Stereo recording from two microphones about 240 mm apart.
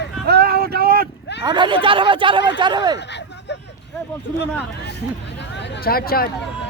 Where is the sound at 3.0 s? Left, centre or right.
Left.